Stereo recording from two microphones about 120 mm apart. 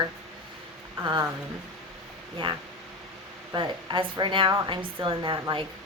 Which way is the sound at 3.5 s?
40° right (ahead or behind).